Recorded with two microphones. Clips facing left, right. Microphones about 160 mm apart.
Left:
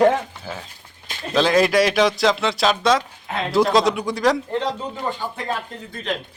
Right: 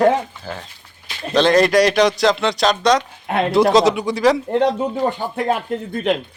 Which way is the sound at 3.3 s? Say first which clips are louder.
Right 7 dB; 60° right (ahead or behind).